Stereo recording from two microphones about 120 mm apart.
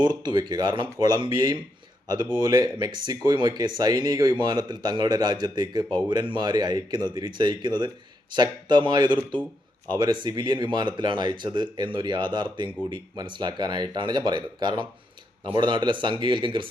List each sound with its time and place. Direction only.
0.0 s speech: 35° right (ahead or behind)